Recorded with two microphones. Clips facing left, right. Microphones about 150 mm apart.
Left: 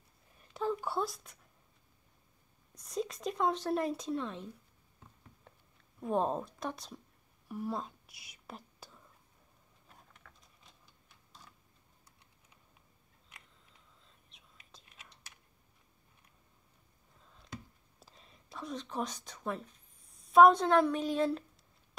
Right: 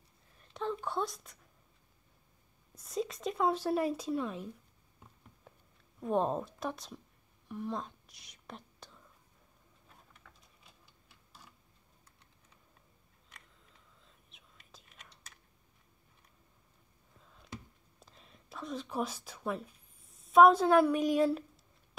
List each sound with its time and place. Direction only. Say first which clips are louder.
0.5 s a sound: left 2 dB; 5° left (ahead or behind)
2.7 s speech: right 1 dB; centre (ahead or behind)
5.5 s a sound: right 3 dB; 5° right (ahead or behind)
5.9 s speech: right 1 dB; centre (ahead or behind)
7.4 s whispering: left 1 dB; 10° left (ahead or behind)
14.0 s whispering: right 1 dB; centre (ahead or behind)
17.9 s speech: even; centre (ahead or behind)